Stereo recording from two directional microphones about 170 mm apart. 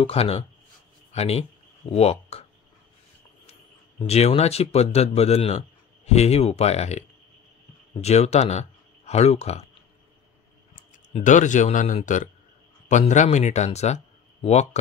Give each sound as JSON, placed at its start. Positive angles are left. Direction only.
{"t": 0.0, "sound": "speech", "side_deg": 35}
{"t": 4.0, "sound": "speech", "side_deg": 40}
{"t": 11.2, "sound": "speech", "side_deg": 45}